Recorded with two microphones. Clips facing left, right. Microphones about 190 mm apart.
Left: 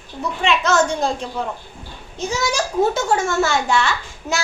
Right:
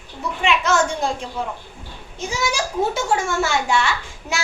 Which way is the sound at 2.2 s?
10° right (ahead or behind).